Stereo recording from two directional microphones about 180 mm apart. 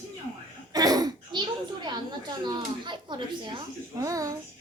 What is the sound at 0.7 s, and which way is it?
Speech, 20° right (ahead or behind).